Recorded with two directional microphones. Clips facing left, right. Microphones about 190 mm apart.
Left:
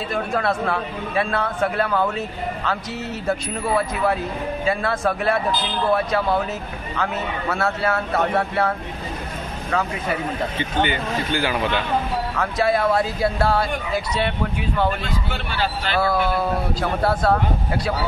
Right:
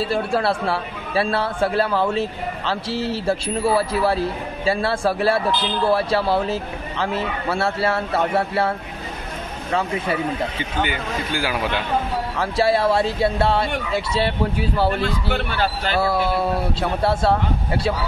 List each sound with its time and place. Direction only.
0.1 s a man's voice: 30° right (ahead or behind)
10.8 s speech: 5° right (ahead or behind)
12.4 s a man's voice: 30° right (ahead or behind)
15.3 s speech: 50° right (ahead or behind)
16.0 s a man's voice: 30° right (ahead or behind)